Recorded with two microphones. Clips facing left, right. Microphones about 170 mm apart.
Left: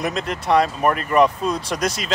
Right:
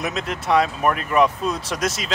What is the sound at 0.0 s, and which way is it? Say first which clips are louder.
Speech: left 2 dB; centre (ahead or behind).